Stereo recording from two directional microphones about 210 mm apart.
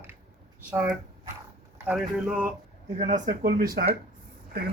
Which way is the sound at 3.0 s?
35° right (ahead or behind).